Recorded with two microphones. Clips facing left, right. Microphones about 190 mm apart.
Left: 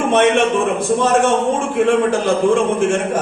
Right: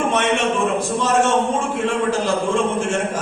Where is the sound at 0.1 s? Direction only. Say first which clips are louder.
Left 6 dB; 55° left (ahead or behind).